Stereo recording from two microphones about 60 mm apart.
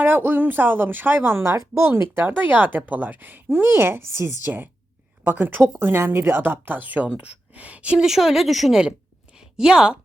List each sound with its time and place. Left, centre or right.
0.0 s speech: right
1.4 s speech: right
1.9 s speech: right
4.4 s speech: right
8.0 s speech: centre
9.3 s a woman's voice: centre